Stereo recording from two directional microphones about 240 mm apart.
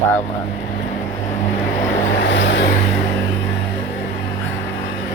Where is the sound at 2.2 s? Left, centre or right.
Left.